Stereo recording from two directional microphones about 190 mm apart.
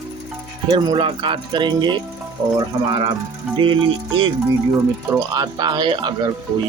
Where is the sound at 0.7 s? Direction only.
25° right (ahead or behind).